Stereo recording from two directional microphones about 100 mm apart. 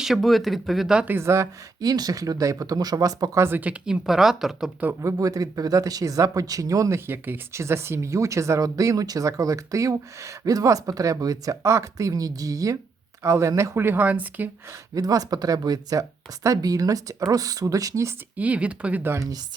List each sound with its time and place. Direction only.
0.0 s speech: centre (ahead or behind)
1.0 s speech: 25° right (ahead or behind)
1.8 s speech: 40° right (ahead or behind)
3.4 s speech: 20° right (ahead or behind)
5.0 s speech: 35° right (ahead or behind)
7.1 s speech: 25° right (ahead or behind)
13.7 s speech: 20° right (ahead or behind)
14.7 s speech: 40° right (ahead or behind)
18.3 s speech: 15° right (ahead or behind)